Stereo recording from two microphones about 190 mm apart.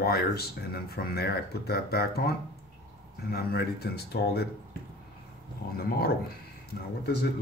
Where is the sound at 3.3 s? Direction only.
55° left (ahead or behind).